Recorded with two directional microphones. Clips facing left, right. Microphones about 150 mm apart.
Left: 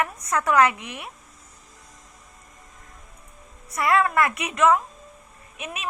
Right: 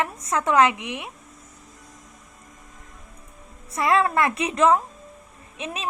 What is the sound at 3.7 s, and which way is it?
A woman's voice, 25° right (ahead or behind).